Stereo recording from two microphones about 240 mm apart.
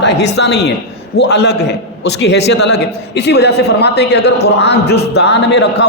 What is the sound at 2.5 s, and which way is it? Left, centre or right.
Speech, left.